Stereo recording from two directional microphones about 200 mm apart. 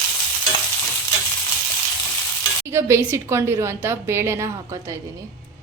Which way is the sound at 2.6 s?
15° right (ahead or behind).